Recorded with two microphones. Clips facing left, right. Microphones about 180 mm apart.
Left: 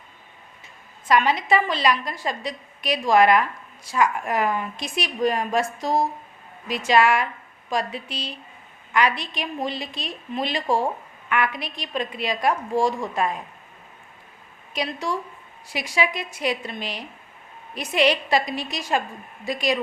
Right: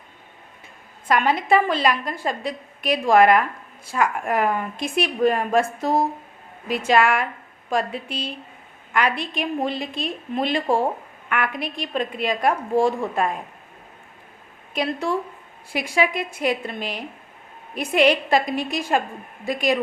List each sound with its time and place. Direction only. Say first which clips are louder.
1.0 s a woman's voice: even; 55° right (ahead or behind)
14.7 s a woman's voice: right 4 dB; 55° right (ahead or behind)